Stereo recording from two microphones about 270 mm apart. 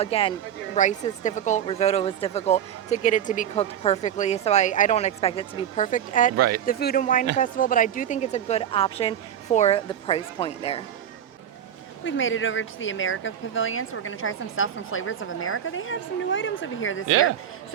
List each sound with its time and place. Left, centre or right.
0.0 s speech: left
12.0 s speech: left